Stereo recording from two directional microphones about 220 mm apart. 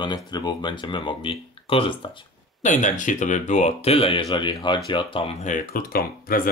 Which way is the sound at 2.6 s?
35° left (ahead or behind).